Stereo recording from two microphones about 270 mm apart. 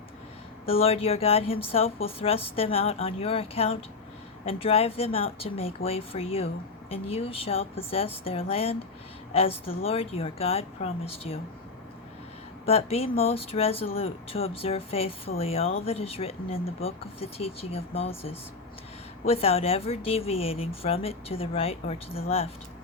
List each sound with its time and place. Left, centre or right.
0.6 s speech: left
12.6 s speech: left
19.2 s speech: left